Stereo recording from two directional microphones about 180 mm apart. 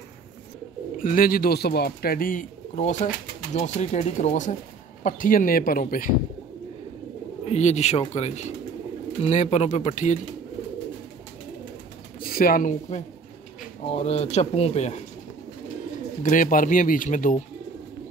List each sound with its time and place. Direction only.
0.9 s speech: 50° left (ahead or behind)
7.4 s speech: 40° left (ahead or behind)
12.2 s speech: 55° left (ahead or behind)
13.8 s speech: 35° left (ahead or behind)
16.2 s speech: 45° left (ahead or behind)